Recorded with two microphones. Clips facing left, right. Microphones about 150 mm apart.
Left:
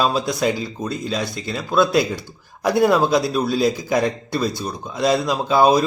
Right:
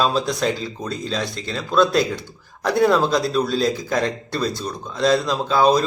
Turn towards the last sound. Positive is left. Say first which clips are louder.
# left 1 dB
turn(degrees=10)  # may be behind; listen again after turning